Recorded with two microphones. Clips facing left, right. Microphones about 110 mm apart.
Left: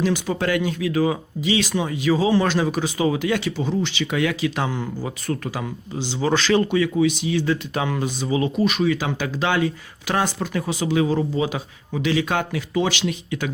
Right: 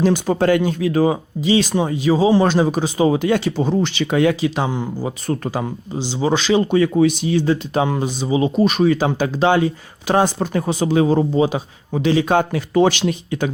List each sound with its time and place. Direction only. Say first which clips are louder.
0.0 s speech: right 6 dB; 40° right (ahead or behind)
4.0 s speech: right 7 dB; 35° right (ahead or behind)
6.7 s speech: right 4 dB; 35° right (ahead or behind)
8.6 s speech: right 5 dB; 40° right (ahead or behind)